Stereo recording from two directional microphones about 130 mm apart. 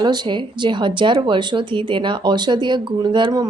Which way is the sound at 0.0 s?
35° right (ahead or behind).